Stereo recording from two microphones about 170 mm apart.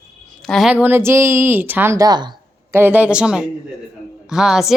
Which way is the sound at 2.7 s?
10° right (ahead or behind).